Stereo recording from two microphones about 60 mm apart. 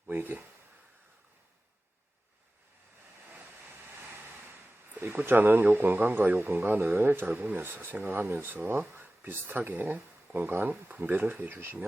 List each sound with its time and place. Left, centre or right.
0.1 s speech: right
4.9 s speech: right
6.4 s speech: right